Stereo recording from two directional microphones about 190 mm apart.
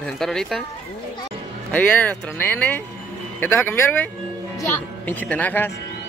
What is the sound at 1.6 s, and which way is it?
Speech, 10° left (ahead or behind).